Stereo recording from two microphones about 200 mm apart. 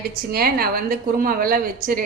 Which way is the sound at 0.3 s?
50° right (ahead or behind).